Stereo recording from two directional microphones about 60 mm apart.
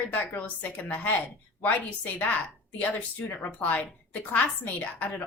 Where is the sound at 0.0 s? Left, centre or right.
Left.